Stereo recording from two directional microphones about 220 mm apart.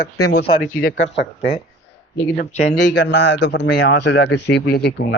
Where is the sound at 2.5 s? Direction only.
30° left (ahead or behind).